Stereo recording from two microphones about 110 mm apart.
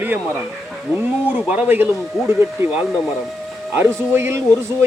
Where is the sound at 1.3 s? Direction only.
10° right (ahead or behind).